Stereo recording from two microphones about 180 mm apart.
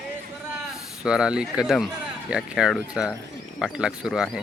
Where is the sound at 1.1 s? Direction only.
5° right (ahead or behind).